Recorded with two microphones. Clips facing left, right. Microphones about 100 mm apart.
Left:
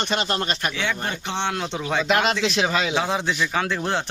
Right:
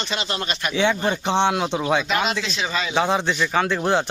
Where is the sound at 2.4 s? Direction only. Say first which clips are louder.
Left 4 dB; 70° left (ahead or behind).